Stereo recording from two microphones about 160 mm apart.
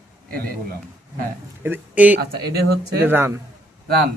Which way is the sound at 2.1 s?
90° right.